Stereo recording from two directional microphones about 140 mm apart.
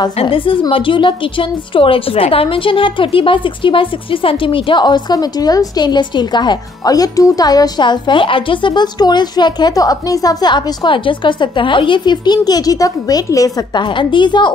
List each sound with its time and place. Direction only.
0.0 s a woman's voice: 40° left (ahead or behind)